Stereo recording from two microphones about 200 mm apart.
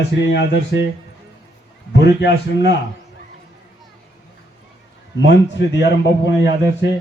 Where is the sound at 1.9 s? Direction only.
60° left (ahead or behind).